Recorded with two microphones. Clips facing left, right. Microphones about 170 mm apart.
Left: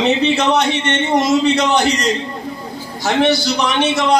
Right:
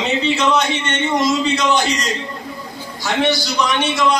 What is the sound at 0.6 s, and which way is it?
A man's voice, 65° left (ahead or behind).